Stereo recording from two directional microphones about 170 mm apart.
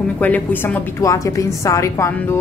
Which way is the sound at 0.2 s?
10° left (ahead or behind).